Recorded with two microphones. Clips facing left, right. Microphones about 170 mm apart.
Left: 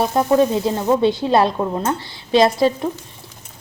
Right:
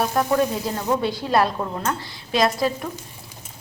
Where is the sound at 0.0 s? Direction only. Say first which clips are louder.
Left 5 dB; 25° left (ahead or behind).